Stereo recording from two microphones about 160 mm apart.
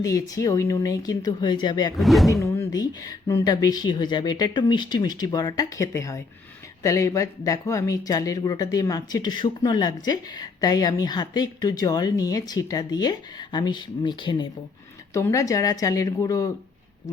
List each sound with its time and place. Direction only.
0.0 s speech: 20° left (ahead or behind)
2.0 s speech: centre (ahead or behind)
2.4 s speech: 20° left (ahead or behind)
15.1 s speech: 20° left (ahead or behind)